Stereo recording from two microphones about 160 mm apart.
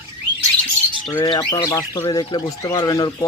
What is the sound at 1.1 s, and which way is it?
Speech, 25° left (ahead or behind).